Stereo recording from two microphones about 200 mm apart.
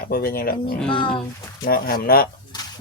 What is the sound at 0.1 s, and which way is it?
Speech, 50° left (ahead or behind).